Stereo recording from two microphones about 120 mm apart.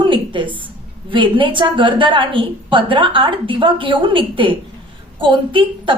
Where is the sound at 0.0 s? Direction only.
45° right (ahead or behind).